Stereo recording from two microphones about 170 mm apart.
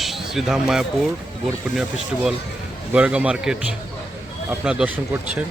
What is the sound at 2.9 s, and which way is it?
A man's voice, 5° right (ahead or behind).